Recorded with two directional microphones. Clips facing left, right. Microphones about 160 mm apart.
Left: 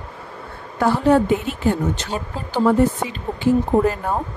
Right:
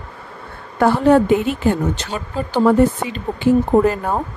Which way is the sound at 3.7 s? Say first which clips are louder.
Right 3 dB; 65° right (ahead or behind).